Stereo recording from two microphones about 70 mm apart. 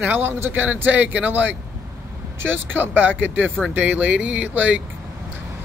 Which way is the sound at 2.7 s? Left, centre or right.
Right.